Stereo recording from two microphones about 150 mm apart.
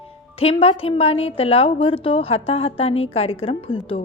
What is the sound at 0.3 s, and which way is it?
A woman's voice, 40° left (ahead or behind).